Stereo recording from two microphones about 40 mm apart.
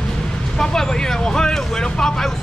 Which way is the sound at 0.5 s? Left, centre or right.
Centre.